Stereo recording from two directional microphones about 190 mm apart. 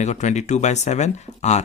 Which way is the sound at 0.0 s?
40° left (ahead or behind).